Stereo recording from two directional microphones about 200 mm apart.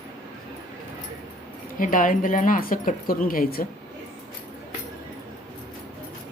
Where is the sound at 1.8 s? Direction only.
40° left (ahead or behind).